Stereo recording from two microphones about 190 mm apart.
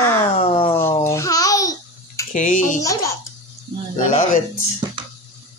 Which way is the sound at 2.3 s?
40° left (ahead or behind).